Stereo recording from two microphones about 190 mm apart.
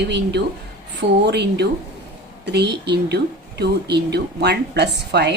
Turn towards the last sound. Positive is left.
turn(degrees=-60)  # may be behind; listen again after turning